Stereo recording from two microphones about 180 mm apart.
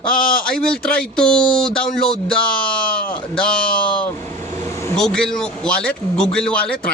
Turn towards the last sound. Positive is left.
turn(degrees=5)  # may be behind; listen again after turning